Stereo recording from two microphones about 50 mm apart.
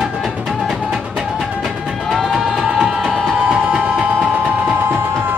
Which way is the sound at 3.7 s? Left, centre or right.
Centre.